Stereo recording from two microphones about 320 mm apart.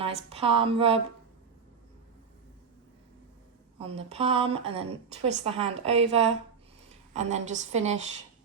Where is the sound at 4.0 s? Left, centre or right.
Centre.